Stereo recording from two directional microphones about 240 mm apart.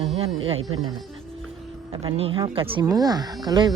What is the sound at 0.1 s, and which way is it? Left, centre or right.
Music, right.